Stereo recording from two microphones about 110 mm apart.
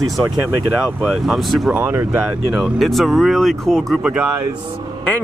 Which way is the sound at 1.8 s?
20° right (ahead or behind).